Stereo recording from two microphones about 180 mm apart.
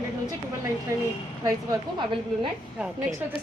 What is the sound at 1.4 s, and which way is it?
Speech, 20° right (ahead or behind).